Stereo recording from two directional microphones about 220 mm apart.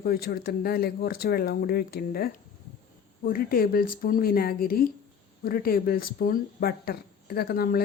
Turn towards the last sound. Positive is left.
turn(degrees=45)  # may be behind; listen again after turning